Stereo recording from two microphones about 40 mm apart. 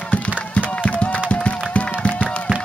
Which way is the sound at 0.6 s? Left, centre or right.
Left.